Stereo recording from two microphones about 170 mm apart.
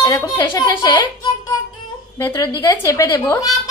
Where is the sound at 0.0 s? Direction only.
25° left (ahead or behind).